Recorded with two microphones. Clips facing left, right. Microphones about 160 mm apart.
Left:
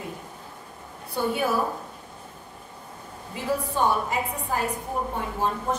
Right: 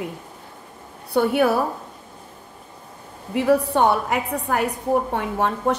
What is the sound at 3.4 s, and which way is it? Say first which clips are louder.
A woman's voice: right 8 dB; 70° right (ahead or behind).